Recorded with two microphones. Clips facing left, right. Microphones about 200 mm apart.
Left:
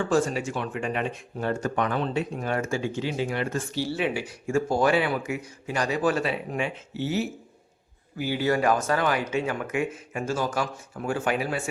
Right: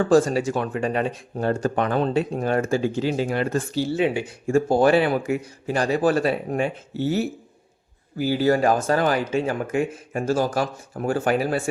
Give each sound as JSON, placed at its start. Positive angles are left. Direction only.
{"t": 0.0, "sound": "speech", "side_deg": -35}
{"t": 3.8, "sound": "speech", "side_deg": -25}
{"t": 8.2, "sound": "speech", "side_deg": -35}